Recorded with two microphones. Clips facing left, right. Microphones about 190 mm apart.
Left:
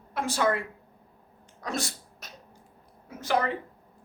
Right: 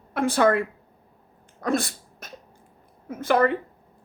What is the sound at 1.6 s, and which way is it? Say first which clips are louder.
Sneeze: right 8 dB; 55° right (ahead or behind).